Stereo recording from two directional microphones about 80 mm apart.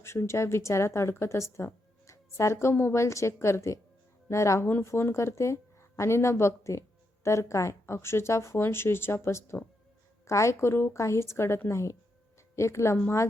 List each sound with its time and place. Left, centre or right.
0.0 s a woman's voice: left